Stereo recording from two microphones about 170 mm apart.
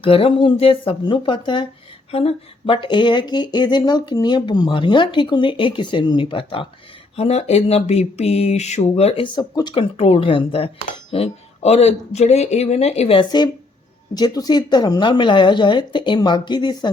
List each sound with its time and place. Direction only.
0.0 s speech: 30° left (ahead or behind)